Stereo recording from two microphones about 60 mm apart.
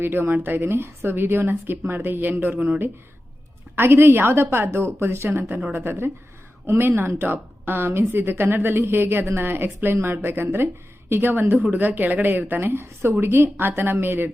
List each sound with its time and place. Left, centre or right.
0.0 s a woman's voice: right